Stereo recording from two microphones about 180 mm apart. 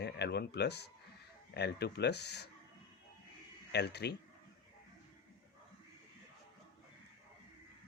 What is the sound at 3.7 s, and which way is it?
Speech, 65° left (ahead or behind).